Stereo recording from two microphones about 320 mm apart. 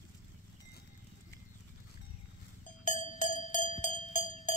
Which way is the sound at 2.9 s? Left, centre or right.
Left.